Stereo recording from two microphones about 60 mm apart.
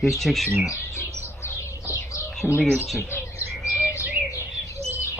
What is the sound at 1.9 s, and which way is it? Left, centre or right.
Bird, left.